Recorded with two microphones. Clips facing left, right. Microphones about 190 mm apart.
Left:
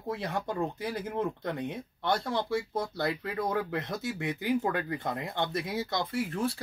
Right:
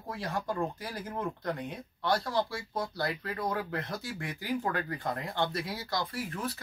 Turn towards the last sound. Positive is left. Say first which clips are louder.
# left 5 dB
turn(degrees=25)  # may be behind; listen again after turning